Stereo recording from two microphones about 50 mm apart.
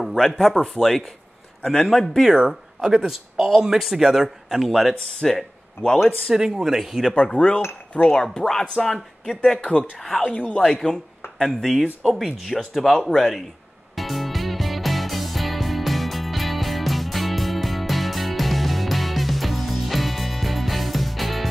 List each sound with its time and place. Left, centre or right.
0.0 s a man's voice: centre
2.3 s speech: centre
3.1 s a man's voice: centre
5.2 s speech: centre
6.0 s speech: centre
7.2 s speech: centre
9.6 s speech: left
10.5 s speech: centre
11.3 s a man's voice: centre
13.9 s music: centre